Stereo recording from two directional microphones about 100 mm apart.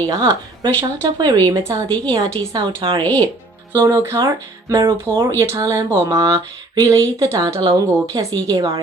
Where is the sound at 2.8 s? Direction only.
55° right (ahead or behind).